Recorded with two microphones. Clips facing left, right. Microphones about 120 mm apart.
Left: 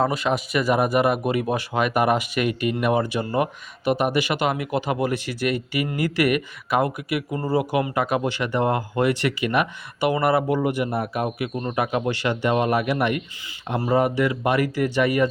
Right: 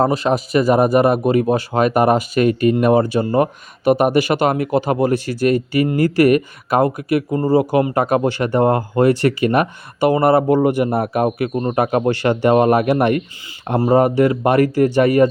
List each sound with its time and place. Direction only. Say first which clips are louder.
0.0 s speech: right 6 dB; 35° right (ahead or behind); by 13.2 s 50° right (ahead or behind)
13.7 s speech: right 7 dB; 40° right (ahead or behind)